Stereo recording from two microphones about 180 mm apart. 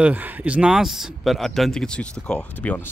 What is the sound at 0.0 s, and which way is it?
Speech, 10° right (ahead or behind).